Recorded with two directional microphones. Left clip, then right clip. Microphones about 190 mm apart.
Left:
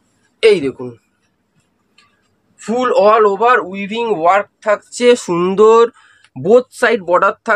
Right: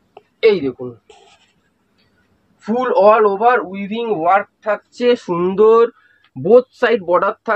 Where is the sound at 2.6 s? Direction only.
35° left (ahead or behind).